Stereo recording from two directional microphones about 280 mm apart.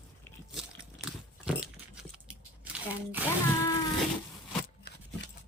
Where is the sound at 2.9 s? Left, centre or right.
Centre.